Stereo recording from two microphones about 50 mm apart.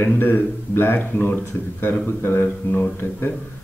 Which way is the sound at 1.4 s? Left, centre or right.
Left.